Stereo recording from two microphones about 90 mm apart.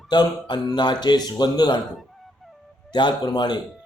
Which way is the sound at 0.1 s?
55° left (ahead or behind).